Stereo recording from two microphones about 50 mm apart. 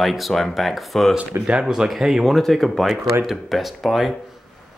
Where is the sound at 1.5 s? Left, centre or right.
Centre.